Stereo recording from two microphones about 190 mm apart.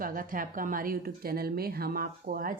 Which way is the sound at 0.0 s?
45° right (ahead or behind).